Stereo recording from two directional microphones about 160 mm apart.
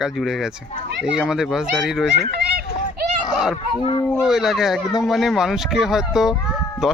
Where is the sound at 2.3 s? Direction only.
80° right.